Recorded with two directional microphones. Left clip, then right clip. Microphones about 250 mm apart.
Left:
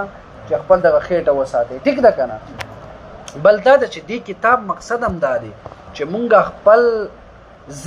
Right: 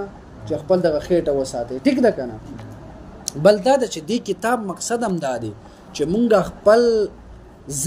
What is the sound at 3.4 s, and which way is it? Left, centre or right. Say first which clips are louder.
Speech: left 4 dB; right.